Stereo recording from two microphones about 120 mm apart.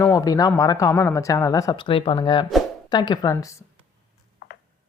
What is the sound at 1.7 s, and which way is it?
Speech, 45° left (ahead or behind).